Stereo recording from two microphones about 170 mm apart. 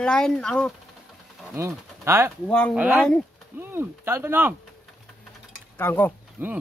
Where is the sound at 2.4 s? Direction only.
5° left (ahead or behind).